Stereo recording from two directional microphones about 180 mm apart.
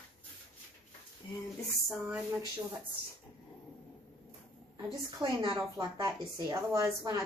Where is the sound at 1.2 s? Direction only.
25° left (ahead or behind).